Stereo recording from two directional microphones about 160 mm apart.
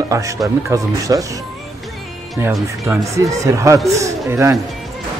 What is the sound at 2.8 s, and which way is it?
Speech, 20° right (ahead or behind).